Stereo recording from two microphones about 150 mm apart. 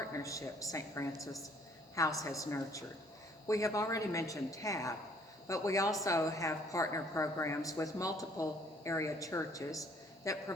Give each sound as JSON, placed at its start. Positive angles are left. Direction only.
{"t": 0.0, "sound": "a woman's voice", "side_deg": 20}